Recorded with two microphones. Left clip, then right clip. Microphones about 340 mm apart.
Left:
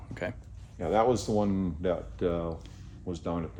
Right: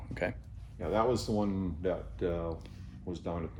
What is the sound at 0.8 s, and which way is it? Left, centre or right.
Speech, left.